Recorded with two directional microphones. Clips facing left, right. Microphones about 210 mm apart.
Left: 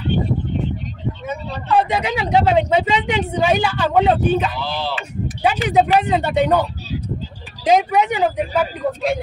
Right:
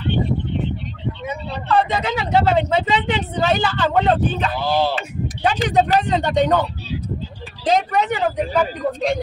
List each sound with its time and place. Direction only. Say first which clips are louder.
1.7 s speech: left 1 dB; 10° left (ahead or behind)
4.6 s speech: right 5 dB; 45° right (ahead or behind)
5.4 s speech: left 1 dB; 10° left (ahead or behind)
7.6 s speech: left 3 dB; 10° left (ahead or behind)